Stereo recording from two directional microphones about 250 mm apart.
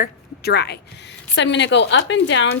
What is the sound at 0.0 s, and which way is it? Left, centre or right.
A woman's voice, left.